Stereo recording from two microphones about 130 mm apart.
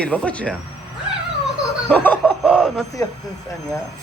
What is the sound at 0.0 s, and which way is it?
Speech, 10° left (ahead or behind).